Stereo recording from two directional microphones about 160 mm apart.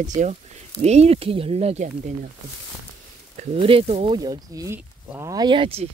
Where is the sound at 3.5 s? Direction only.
35° right (ahead or behind).